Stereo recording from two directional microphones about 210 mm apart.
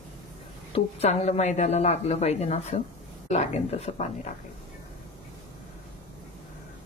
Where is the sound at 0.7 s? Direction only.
30° left (ahead or behind).